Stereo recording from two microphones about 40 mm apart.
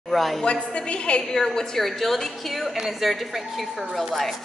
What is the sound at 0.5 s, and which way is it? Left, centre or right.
Speech, left.